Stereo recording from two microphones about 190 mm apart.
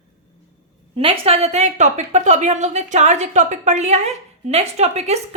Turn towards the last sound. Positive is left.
turn(degrees=-35)  # may be behind; listen again after turning